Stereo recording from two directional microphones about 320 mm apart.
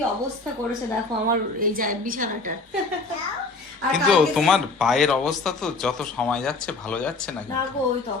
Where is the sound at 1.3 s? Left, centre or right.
Right.